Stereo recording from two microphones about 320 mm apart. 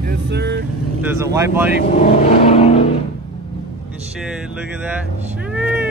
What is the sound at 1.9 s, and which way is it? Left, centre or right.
Vehicle, left.